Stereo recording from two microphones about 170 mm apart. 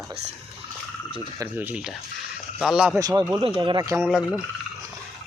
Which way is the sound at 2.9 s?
20° right (ahead or behind).